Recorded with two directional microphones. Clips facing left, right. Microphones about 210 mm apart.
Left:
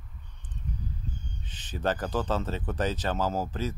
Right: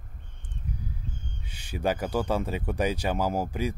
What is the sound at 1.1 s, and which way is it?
Owl, 40° left (ahead or behind).